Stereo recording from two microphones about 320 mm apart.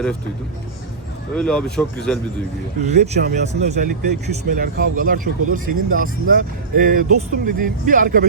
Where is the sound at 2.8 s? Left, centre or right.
Right.